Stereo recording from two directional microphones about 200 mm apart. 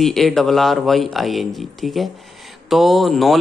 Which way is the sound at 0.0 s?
Centre (ahead or behind).